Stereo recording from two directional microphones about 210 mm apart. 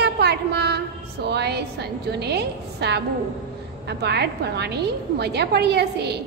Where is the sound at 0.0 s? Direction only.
50° right (ahead or behind).